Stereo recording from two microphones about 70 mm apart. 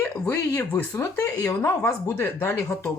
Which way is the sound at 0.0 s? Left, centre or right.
Left.